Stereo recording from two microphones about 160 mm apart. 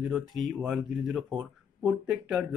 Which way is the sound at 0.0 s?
Centre (ahead or behind).